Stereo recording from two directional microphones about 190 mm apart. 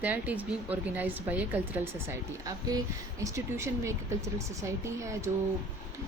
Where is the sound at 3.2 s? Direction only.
15° right (ahead or behind).